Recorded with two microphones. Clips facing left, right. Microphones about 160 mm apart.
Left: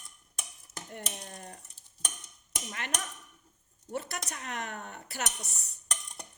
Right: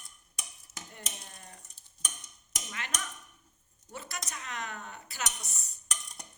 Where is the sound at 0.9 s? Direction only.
50° left (ahead or behind).